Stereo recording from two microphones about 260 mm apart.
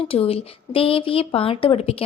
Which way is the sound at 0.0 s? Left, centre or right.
Left.